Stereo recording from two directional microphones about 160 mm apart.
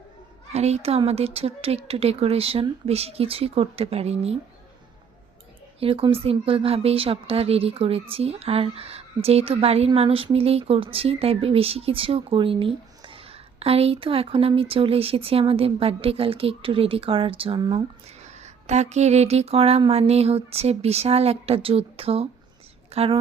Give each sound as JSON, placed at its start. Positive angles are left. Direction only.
{"t": 0.5, "sound": "a woman's voice", "side_deg": -40}
{"t": 5.8, "sound": "a woman's voice", "side_deg": -35}
{"t": 18.2, "sound": "a woman's voice", "side_deg": -45}